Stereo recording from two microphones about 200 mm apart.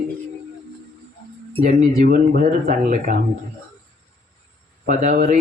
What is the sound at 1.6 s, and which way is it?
Speech, 45° right (ahead or behind).